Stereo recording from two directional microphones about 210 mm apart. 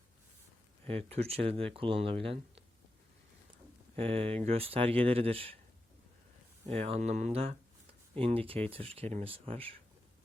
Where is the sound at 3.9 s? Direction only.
25° right (ahead or behind).